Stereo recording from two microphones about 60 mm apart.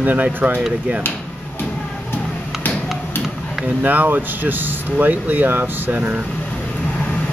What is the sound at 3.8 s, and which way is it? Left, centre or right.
Speech, right.